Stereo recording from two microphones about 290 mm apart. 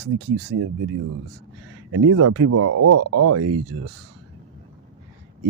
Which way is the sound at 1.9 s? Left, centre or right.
Right.